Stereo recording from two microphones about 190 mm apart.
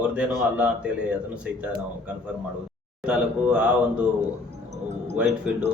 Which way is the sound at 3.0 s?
5° right (ahead or behind).